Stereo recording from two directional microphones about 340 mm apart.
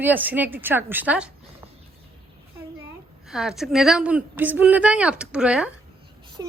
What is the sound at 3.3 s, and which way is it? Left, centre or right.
A woman's voice, centre.